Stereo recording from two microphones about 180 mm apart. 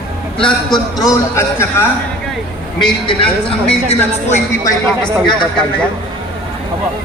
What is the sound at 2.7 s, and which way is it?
Speech, 25° left (ahead or behind).